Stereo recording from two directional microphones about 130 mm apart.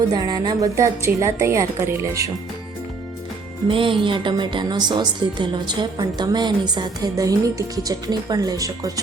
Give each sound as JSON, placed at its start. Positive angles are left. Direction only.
{"t": 0.1, "sound": "a woman's voice", "side_deg": -30}
{"t": 3.7, "sound": "a woman's voice", "side_deg": -40}